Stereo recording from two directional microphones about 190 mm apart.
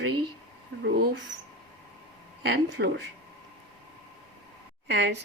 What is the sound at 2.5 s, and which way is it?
Speech, 65° right (ahead or behind).